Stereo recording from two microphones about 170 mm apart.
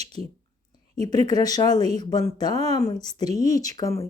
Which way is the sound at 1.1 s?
20° left (ahead or behind).